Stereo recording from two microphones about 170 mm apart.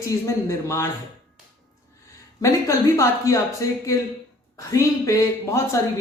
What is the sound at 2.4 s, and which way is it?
Speech, 20° left (ahead or behind).